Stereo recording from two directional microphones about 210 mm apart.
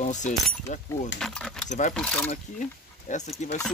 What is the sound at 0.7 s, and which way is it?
Speech, 35° left (ahead or behind).